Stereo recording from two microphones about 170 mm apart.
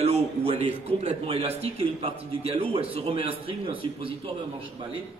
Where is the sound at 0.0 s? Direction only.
35° right (ahead or behind).